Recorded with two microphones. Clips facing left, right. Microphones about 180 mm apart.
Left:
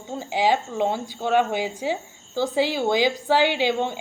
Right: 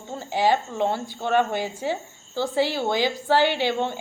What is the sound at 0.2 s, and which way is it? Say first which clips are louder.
A woman's voice: even; 10° left (ahead or behind).